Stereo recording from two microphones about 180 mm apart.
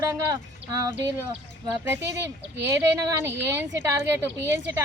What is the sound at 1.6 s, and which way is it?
Speech, 10° right (ahead or behind).